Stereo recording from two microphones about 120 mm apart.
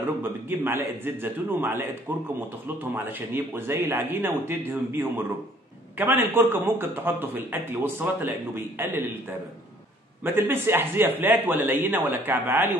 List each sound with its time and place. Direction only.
0.0 s speech: 20° right (ahead or behind)
10.2 s speech: 20° right (ahead or behind)